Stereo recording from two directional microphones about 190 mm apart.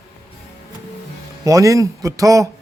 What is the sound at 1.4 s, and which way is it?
Speech, 15° right (ahead or behind).